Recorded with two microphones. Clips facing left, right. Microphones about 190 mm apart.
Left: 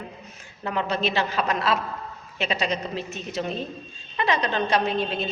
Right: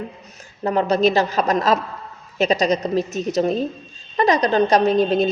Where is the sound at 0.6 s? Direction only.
40° right (ahead or behind).